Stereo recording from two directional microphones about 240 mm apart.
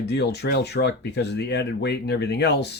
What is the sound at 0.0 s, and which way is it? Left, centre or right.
Speech, left.